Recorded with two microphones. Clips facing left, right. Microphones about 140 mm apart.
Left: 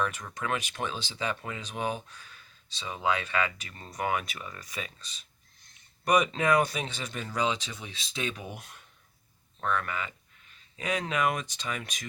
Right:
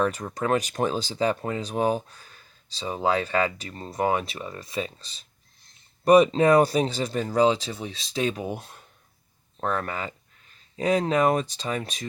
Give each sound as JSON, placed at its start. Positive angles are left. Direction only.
{"t": 0.0, "sound": "speech", "side_deg": -35}